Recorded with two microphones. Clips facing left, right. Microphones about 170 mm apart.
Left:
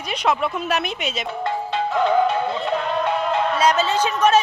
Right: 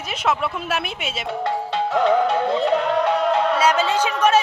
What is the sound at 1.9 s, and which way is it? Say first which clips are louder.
Music: right 1 dB; 75° right (ahead or behind).